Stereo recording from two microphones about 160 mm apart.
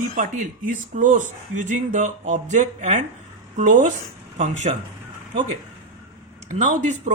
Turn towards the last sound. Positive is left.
turn(degrees=-50)  # may be behind; listen again after turning